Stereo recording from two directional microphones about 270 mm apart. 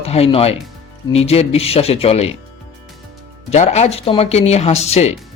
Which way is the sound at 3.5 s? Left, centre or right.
Left.